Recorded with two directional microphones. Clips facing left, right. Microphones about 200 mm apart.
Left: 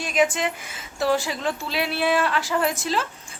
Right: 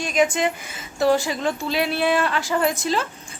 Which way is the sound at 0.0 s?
5° left (ahead or behind).